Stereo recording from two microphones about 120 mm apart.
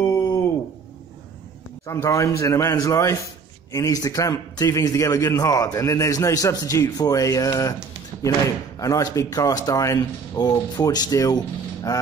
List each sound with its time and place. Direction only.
0.1 s a sound: 35° left (ahead or behind)
1.9 s a man's voice: 25° left (ahead or behind)
8.7 s a man's voice: 30° left (ahead or behind)